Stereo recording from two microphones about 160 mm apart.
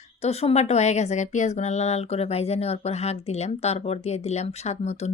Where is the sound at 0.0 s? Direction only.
40° left (ahead or behind).